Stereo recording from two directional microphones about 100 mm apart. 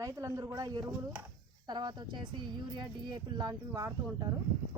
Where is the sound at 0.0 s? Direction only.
30° right (ahead or behind).